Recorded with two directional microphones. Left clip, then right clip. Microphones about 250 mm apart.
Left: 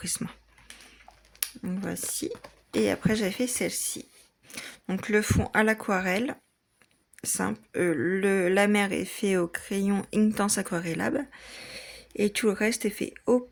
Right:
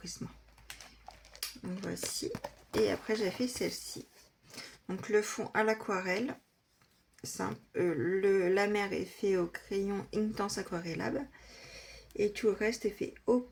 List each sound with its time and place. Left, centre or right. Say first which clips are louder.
0.0 s speech: left 10 dB; left
1.4 s a sound: left 6 dB; left
2.2 s speech: left 4 dB; left